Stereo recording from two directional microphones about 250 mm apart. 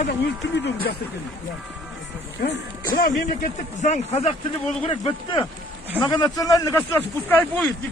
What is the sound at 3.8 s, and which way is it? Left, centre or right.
Speech, left.